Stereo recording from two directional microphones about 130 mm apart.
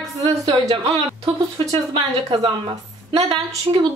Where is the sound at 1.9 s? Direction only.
40° right (ahead or behind).